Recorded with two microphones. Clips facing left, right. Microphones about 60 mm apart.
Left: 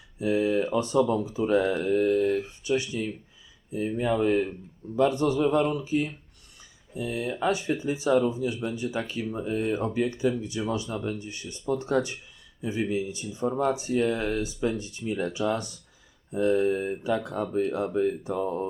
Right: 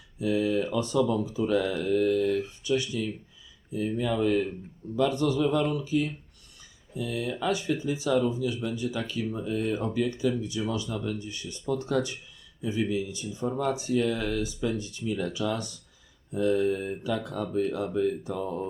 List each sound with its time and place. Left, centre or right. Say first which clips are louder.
0.2 s speech: left 2 dB; left